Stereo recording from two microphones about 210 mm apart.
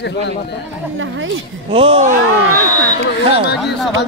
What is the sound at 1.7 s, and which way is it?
Speech, 25° right (ahead or behind).